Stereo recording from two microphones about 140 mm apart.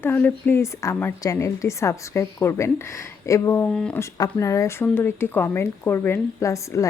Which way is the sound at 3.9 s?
25° left (ahead or behind).